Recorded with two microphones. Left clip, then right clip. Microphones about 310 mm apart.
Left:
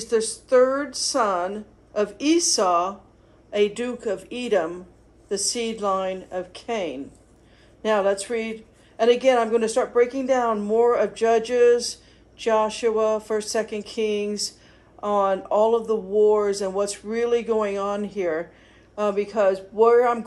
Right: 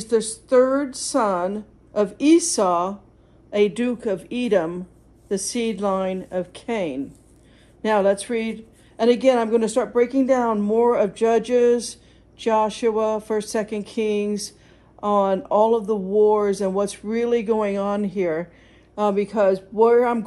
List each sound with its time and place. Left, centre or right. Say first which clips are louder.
0.0 s speech: right 1 dB; right